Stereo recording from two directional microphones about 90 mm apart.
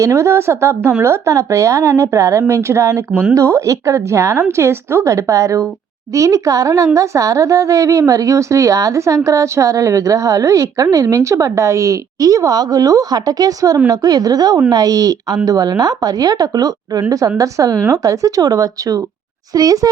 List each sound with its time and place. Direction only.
0.0 s a woman's voice: 35° right (ahead or behind)
3.1 s speech: 10° right (ahead or behind)
3.3 s a woman's voice: 35° right (ahead or behind)